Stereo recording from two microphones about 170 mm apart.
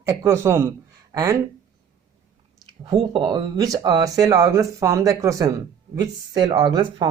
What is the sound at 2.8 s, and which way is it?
Speech, 30° right (ahead or behind).